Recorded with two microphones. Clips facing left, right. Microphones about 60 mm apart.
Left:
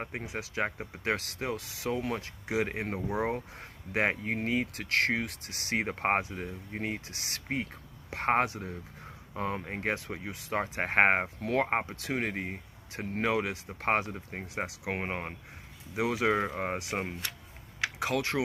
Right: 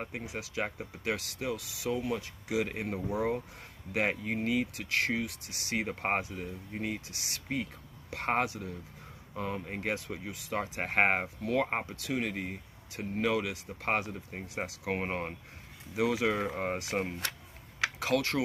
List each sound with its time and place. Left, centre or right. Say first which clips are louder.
0.1 s speech: left 1 dB; left
14.6 s speech: even; centre
15.9 s speech: left 1 dB; left
16.4 s speech: even; centre
17.9 s speech: even; left